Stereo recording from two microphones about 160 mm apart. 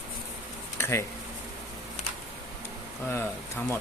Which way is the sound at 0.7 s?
15° left (ahead or behind).